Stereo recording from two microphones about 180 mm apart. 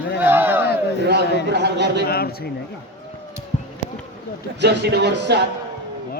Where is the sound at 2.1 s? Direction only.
60° left (ahead or behind).